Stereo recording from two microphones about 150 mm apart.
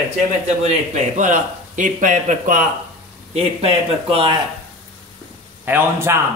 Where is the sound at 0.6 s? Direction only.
50° right (ahead or behind).